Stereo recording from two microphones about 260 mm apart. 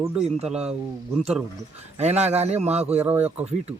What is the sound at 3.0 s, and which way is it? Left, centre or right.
Speech, centre.